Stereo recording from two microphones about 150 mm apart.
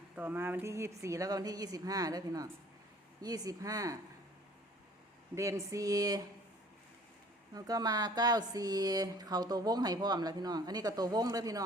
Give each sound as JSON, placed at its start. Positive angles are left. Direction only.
{"t": 0.2, "sound": "mantra", "side_deg": -15}
{"t": 5.3, "sound": "mantra", "side_deg": -20}
{"t": 7.5, "sound": "mantra", "side_deg": -25}